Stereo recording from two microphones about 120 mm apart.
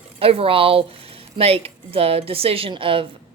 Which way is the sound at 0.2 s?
50° right (ahead or behind).